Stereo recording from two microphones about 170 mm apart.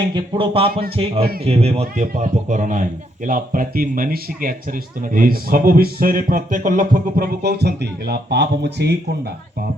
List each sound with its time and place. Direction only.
0.1 s a man's voice: 30° right (ahead or behind); by 9.0 s 80° right